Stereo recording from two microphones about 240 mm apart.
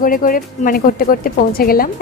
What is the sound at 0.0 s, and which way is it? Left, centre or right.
A woman's voice, left.